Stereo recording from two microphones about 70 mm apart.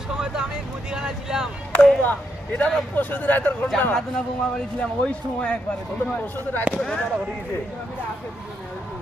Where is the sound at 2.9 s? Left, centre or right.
Left.